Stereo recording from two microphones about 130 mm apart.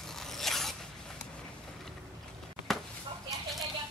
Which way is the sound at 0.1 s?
Centre (ahead or behind).